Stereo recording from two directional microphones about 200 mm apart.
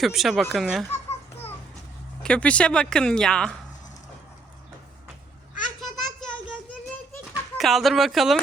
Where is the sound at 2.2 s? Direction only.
5° left (ahead or behind).